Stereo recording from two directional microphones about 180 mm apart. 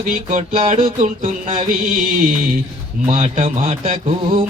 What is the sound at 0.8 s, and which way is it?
Mantra, 35° right (ahead or behind).